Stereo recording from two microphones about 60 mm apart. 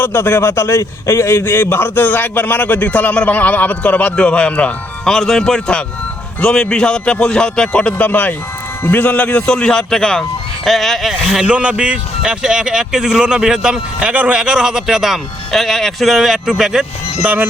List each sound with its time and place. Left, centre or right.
0.0 s a man's voice: left; by 4.7 s centre
5.0 s speech: centre; by 8.4 s left
8.8 s a man's voice: left
9.0 s speech: left; by 11.1 s centre
11.1 s speech: centre
11.5 s speech: centre